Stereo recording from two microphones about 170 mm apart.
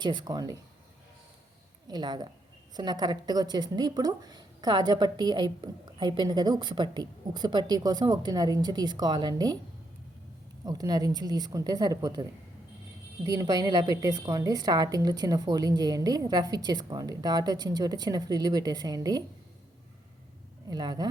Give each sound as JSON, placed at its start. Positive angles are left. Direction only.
{"t": 0.0, "sound": "a woman's voice", "side_deg": -25}
{"t": 1.9, "sound": "a woman's voice", "side_deg": -25}
{"t": 10.7, "sound": "a woman's voice", "side_deg": -20}
{"t": 20.7, "sound": "a woman's voice", "side_deg": -25}